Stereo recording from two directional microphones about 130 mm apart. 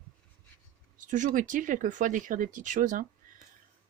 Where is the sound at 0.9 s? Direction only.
80° right.